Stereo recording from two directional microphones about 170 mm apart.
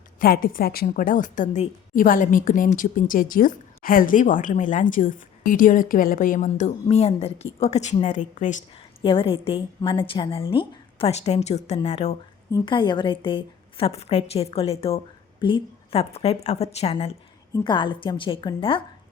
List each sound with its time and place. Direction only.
0.2 s a woman's voice: 60° left (ahead or behind)
9.0 s a woman's voice: 30° left (ahead or behind)
12.5 s a woman's voice: 25° left (ahead or behind)
17.5 s a woman's voice: 25° left (ahead or behind)